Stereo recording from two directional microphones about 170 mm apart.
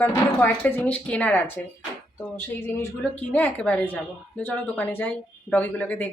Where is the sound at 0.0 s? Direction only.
10° left (ahead or behind).